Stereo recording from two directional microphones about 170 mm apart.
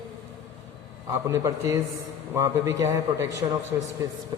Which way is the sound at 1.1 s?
15° right (ahead or behind).